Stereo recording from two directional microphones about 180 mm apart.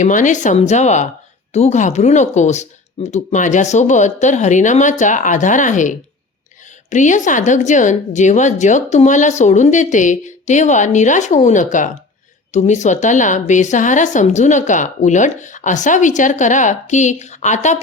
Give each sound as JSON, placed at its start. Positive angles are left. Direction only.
{"t": 0.0, "sound": "a woman's voice", "side_deg": 45}